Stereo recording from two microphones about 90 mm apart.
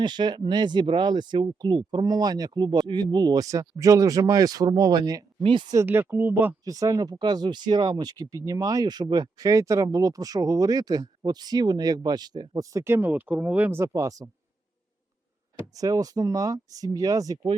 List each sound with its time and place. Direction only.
0.0 s speech: 55° right (ahead or behind)
5.4 s speech: 70° right (ahead or behind)
5.8 s speech: 25° right (ahead or behind)
6.7 s speech: 40° right (ahead or behind)
12.7 s speech: 25° right (ahead or behind)
15.7 s speech: 40° right (ahead or behind)